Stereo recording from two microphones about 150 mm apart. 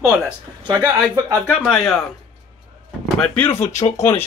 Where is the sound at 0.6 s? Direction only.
20° right (ahead or behind).